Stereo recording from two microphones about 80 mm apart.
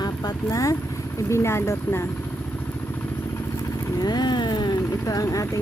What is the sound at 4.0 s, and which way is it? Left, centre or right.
Speech, left.